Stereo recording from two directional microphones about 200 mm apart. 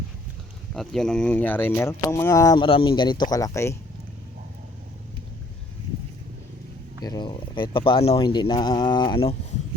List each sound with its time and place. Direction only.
0.7 s speech: centre (ahead or behind)
7.0 s speech: 20° left (ahead or behind)